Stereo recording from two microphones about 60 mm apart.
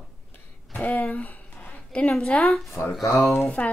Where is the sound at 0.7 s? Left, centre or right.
Left.